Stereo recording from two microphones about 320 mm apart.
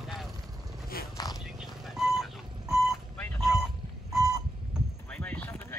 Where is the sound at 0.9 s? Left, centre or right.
Left.